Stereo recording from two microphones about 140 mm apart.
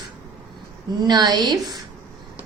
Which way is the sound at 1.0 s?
30° right (ahead or behind).